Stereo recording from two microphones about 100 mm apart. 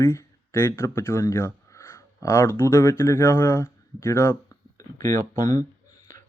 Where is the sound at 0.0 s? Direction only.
25° left (ahead or behind).